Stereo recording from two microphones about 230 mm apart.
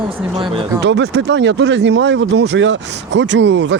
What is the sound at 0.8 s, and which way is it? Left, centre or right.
Speech, right.